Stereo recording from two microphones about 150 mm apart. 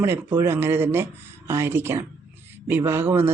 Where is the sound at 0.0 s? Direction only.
15° right (ahead or behind).